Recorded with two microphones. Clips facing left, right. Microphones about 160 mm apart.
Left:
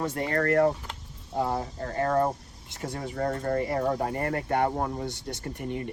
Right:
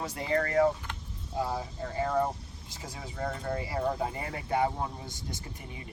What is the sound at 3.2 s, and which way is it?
Speech, 45° left (ahead or behind).